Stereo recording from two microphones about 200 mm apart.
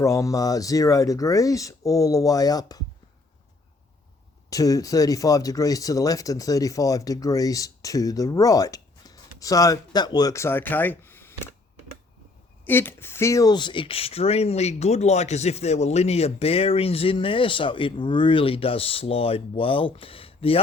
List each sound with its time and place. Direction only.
0.0 s speech: 15° left (ahead or behind)
4.4 s speech: 15° left (ahead or behind)
12.6 s speech: 10° left (ahead or behind); by 20.6 s 30° left (ahead or behind)